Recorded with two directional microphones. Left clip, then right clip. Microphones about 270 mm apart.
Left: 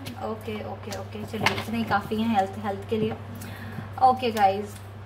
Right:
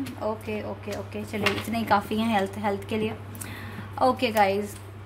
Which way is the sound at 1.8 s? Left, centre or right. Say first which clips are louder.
Right 3 dB; right.